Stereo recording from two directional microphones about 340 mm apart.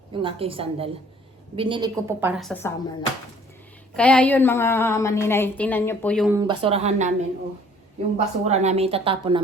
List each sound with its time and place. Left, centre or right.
0.1 s a woman's voice: centre
3.9 s a woman's voice: centre
8.1 s speech: centre